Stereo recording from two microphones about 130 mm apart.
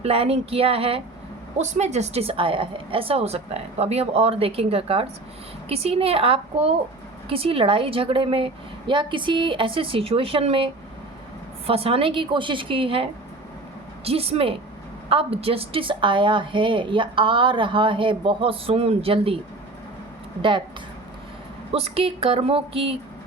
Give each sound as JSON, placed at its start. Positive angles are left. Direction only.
{"t": 0.0, "sound": "a woman's voice", "side_deg": -50}
{"t": 1.5, "sound": "a woman's voice", "side_deg": -60}
{"t": 21.7, "sound": "a woman's voice", "side_deg": -50}